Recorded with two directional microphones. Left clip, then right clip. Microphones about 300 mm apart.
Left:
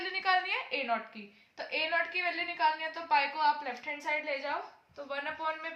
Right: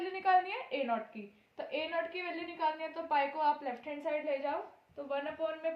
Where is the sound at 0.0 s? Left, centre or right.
Left.